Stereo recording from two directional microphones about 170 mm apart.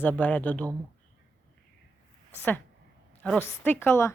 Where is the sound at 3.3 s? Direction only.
10° left (ahead or behind).